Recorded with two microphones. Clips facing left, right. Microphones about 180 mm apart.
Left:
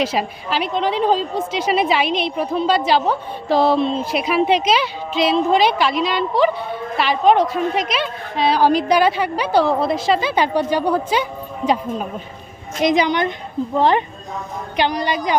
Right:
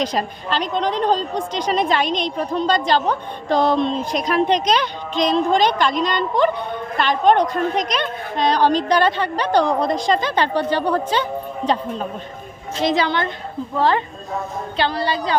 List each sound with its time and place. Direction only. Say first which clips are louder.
0.0 s a woman's voice: left 1 dB; 5° left (ahead or behind)